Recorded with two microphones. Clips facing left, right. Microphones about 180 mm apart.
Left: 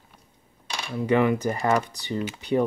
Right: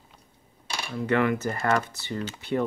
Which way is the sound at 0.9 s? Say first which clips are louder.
Left 3 dB; 15° left (ahead or behind).